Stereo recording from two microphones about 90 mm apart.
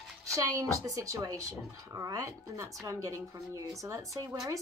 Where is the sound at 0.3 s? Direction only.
35° right (ahead or behind).